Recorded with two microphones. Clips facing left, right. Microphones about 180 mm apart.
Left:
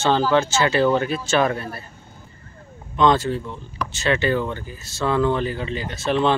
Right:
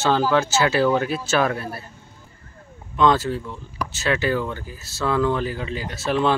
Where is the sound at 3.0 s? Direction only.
5° right (ahead or behind).